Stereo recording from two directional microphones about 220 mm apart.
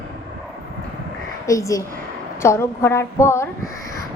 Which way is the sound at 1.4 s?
15° left (ahead or behind).